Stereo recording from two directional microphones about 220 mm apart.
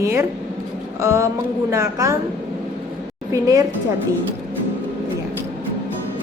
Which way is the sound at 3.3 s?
15° right (ahead or behind).